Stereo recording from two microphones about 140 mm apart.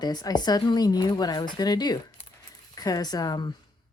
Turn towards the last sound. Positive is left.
turn(degrees=30)  # may be behind; listen again after turning